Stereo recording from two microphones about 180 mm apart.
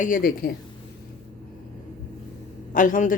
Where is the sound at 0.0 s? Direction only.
50° left (ahead or behind).